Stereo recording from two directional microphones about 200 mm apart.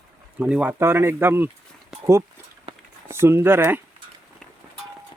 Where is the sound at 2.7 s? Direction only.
30° right (ahead or behind).